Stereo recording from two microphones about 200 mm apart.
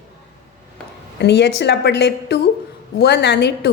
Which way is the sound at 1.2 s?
55° left (ahead or behind).